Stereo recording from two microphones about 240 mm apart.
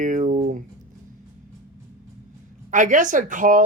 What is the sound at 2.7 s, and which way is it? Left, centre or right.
Speech, right.